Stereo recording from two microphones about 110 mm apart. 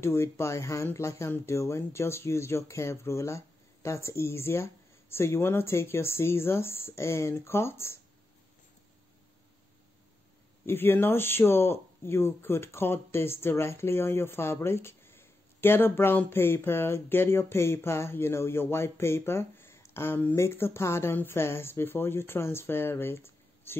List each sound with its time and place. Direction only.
0.0 s speech: 25° left (ahead or behind)
10.6 s speech: 20° left (ahead or behind)